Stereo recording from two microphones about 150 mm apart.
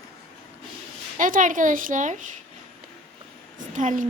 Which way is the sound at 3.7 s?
55° right (ahead or behind).